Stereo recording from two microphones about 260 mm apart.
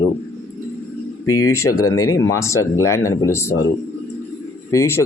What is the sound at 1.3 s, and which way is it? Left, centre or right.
Speech, left.